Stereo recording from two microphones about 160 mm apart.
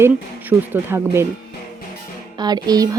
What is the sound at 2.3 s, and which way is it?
Speech, 25° right (ahead or behind).